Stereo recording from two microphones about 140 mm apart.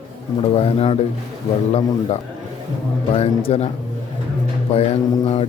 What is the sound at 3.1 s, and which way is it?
Speech, 45° left (ahead or behind).